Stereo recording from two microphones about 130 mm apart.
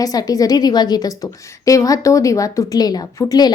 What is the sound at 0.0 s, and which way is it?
A woman's voice, 30° left (ahead or behind).